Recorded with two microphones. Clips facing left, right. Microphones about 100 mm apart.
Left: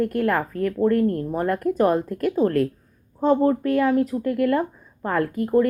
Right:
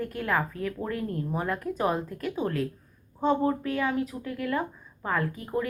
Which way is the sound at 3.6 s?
50° left (ahead or behind).